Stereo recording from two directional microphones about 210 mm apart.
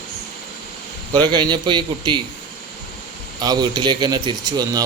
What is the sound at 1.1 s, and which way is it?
Speech, 20° right (ahead or behind).